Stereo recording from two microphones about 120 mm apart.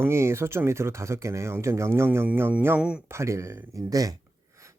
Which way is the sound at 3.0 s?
25° right (ahead or behind).